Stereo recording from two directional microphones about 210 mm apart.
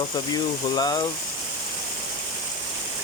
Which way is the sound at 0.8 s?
20° left (ahead or behind).